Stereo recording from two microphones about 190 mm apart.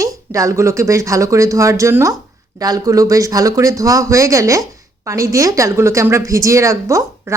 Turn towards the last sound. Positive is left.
turn(degrees=-15)  # may be behind; listen again after turning